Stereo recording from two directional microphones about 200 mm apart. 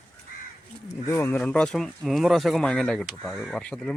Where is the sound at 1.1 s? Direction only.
15° left (ahead or behind).